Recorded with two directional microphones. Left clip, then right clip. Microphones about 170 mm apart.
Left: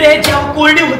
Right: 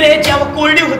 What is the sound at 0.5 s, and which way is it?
Speech, 40° right (ahead or behind).